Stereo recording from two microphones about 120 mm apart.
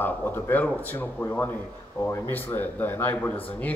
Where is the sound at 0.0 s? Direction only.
15° left (ahead or behind).